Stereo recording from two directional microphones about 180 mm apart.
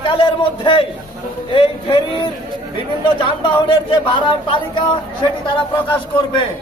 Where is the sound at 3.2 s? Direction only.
30° left (ahead or behind).